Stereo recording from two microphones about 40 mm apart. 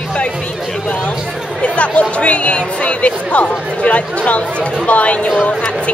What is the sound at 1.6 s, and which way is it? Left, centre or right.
Speech, left.